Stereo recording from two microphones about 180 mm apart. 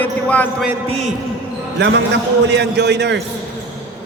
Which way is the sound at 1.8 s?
75° right (ahead or behind).